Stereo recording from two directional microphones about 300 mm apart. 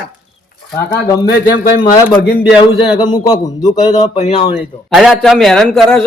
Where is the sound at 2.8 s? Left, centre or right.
Centre.